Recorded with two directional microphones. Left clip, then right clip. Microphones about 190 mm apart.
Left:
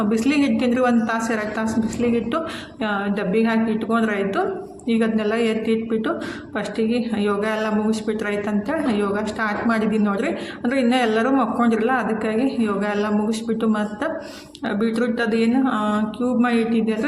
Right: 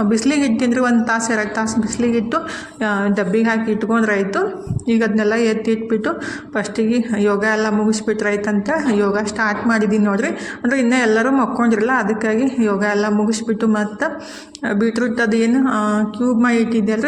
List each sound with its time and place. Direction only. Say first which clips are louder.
0.1 s speech: right 2 dB; 25° right (ahead or behind)